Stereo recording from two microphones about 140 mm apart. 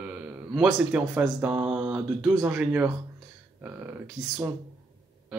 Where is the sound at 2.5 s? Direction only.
10° right (ahead or behind).